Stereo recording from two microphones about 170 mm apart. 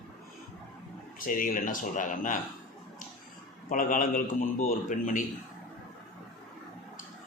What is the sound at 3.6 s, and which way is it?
A man's voice, 50° left (ahead or behind).